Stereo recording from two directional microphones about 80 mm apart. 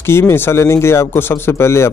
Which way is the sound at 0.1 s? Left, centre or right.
Left.